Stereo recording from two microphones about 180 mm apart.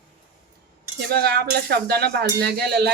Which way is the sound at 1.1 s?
60° right (ahead or behind).